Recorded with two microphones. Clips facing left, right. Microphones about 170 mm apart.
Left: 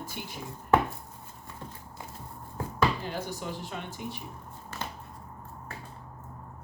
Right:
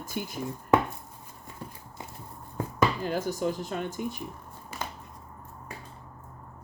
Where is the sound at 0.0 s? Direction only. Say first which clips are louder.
Right 5 dB; 45° right (ahead or behind).